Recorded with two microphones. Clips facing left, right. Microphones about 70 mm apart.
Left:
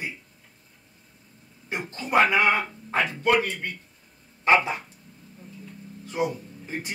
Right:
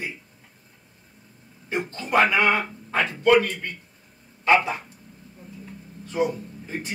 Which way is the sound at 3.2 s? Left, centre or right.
Centre.